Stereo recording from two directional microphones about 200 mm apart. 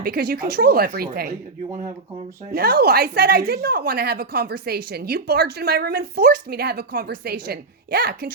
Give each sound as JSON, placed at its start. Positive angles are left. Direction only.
{"t": 0.0, "sound": "speech", "side_deg": -50}
{"t": 2.6, "sound": "speech", "side_deg": -50}